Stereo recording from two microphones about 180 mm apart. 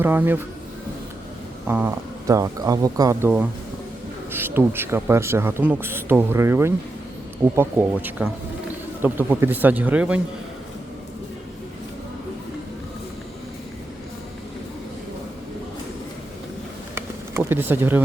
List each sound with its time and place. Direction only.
0.0 s speech: 10° right (ahead or behind)
1.6 s speech: 10° right (ahead or behind)
16.9 s a sound: 10° right (ahead or behind)